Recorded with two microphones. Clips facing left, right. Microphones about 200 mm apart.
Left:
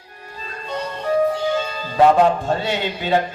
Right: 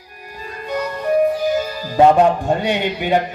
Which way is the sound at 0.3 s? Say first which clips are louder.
Right 3 dB; 25° left (ahead or behind).